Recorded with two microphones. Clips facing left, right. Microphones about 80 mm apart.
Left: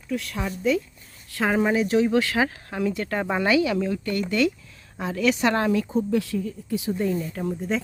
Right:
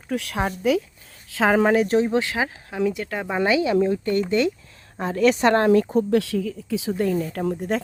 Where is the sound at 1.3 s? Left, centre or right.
Right.